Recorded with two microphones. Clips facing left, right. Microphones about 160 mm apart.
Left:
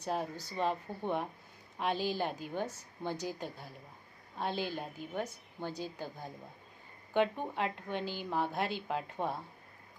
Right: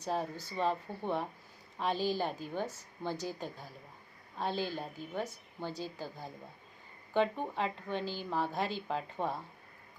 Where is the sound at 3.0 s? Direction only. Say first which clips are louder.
Even; 15° left (ahead or behind).